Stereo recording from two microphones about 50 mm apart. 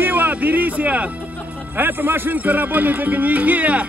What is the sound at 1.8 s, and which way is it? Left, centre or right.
Speech, right.